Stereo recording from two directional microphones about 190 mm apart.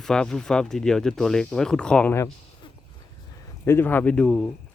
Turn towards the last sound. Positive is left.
turn(degrees=5)  # may be behind; listen again after turning